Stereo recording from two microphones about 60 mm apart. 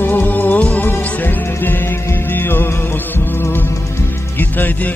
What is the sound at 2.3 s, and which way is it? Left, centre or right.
Music, left.